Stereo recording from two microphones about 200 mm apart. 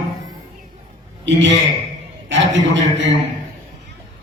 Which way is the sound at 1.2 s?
65° right (ahead or behind).